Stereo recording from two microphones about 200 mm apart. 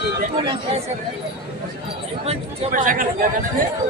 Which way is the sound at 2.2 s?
35° right (ahead or behind).